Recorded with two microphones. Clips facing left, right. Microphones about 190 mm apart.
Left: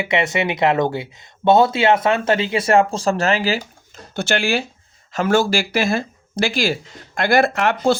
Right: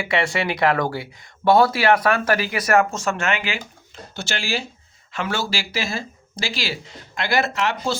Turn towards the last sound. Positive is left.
turn(degrees=55)  # may be behind; listen again after turning